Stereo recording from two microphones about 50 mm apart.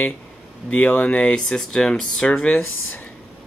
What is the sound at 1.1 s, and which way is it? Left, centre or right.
Speech, centre.